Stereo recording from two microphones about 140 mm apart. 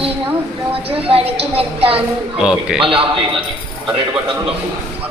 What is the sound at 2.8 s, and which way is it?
Speech, 40° right (ahead or behind).